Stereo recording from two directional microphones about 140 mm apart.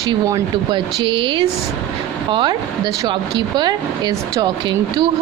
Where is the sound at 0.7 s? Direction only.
40° right (ahead or behind).